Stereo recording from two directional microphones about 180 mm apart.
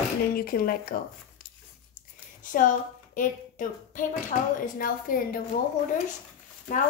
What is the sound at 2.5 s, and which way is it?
A woman's voice, 45° left (ahead or behind).